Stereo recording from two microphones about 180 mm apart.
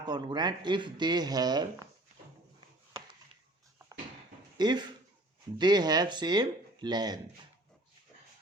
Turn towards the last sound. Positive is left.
turn(degrees=-25)  # may be behind; listen again after turning